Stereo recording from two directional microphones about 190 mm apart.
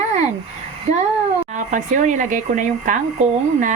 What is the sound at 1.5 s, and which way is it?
Speech, 40° right (ahead or behind).